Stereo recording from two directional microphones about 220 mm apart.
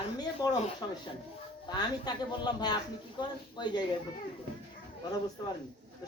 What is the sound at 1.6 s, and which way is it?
A man's voice, 20° left (ahead or behind).